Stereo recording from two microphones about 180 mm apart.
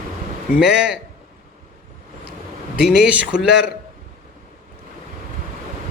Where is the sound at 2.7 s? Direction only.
5° right (ahead or behind).